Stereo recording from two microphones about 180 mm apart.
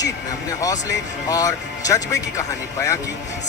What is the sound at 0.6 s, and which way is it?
A man's voice, 20° left (ahead or behind).